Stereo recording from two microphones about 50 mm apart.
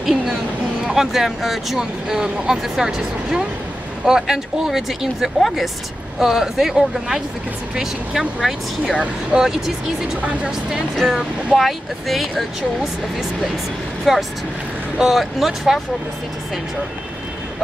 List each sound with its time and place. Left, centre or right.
0.0 s a sound: centre
0.8 s speech: centre
9.3 s speech: right
11.5 s speech: centre
14.1 s speech: centre